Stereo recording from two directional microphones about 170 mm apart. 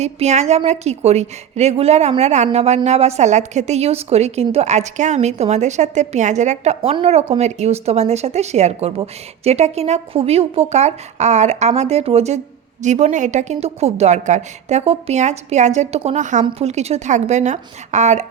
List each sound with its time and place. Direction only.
0.0 s a woman's voice: 40° right (ahead or behind)